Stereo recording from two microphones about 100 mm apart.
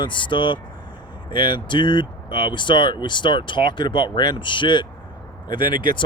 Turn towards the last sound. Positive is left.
turn(degrees=55)  # may be behind; listen again after turning